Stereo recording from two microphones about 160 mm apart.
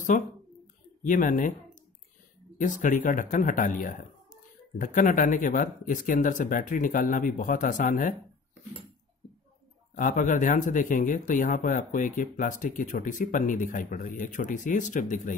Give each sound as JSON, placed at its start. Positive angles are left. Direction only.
{"t": 0.1, "sound": "speech", "side_deg": 50}
{"t": 2.5, "sound": "speech", "side_deg": 55}
{"t": 9.9, "sound": "speech", "side_deg": 55}